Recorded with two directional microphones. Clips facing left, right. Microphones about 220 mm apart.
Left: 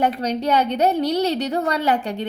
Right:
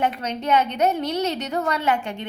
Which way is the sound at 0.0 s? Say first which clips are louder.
Left 4 dB; 35° left (ahead or behind).